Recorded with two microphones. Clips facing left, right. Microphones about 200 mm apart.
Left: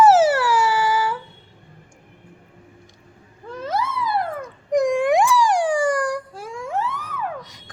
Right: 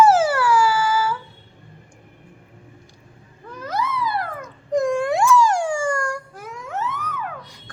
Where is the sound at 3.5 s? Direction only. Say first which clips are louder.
Left 5 dB; 25° left (ahead or behind).